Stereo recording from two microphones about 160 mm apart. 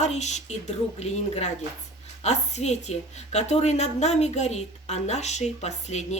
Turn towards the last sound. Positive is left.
turn(degrees=45)  # may be behind; listen again after turning